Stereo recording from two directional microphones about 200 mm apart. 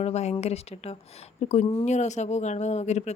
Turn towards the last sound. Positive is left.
turn(degrees=35)  # may be behind; listen again after turning